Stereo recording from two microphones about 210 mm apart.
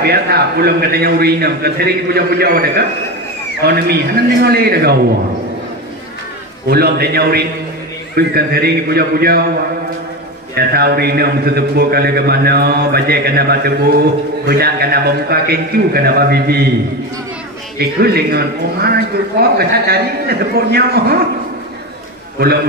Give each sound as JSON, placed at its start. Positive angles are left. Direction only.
{"t": 0.0, "sound": "a man's voice", "side_deg": -50}
{"t": 6.7, "sound": "a man's voice", "side_deg": -50}
{"t": 10.5, "sound": "a man's voice", "side_deg": -50}
{"t": 17.7, "sound": "a man's voice", "side_deg": -50}